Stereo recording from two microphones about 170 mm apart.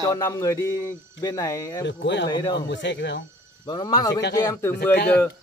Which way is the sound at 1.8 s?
90° left.